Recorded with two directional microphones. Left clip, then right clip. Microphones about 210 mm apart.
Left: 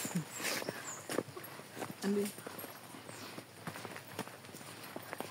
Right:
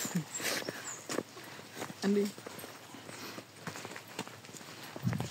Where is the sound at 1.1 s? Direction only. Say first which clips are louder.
Right 1 dB; 50° right (ahead or behind).